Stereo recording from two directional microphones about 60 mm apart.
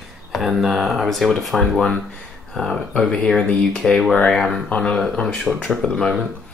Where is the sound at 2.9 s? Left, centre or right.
Centre.